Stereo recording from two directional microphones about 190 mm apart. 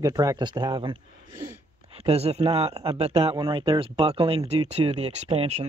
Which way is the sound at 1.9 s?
30° right (ahead or behind).